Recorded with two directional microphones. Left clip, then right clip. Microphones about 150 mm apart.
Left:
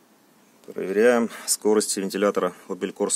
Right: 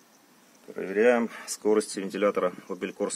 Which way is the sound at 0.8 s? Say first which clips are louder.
Left 3 dB; 25° left (ahead or behind).